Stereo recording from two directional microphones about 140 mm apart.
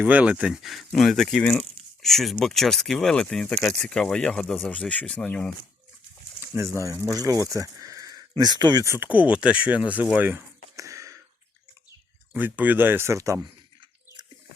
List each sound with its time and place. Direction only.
0.0 s speech: 10° right (ahead or behind); by 5.5 s 5° left (ahead or behind)
6.5 s speech: 20° right (ahead or behind)
12.3 s speech: 15° right (ahead or behind)